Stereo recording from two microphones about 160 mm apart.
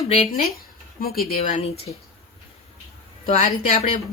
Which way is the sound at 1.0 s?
70° left (ahead or behind).